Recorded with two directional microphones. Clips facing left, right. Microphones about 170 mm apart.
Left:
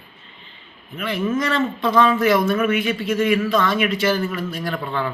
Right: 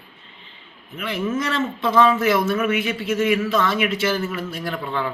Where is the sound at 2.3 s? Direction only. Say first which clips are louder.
Left 2 dB; 5° right (ahead or behind).